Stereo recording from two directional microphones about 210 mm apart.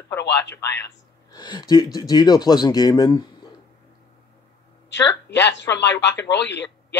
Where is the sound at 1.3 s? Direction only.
20° left (ahead or behind).